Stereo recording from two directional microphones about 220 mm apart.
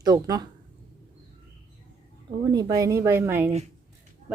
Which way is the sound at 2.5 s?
15° right (ahead or behind).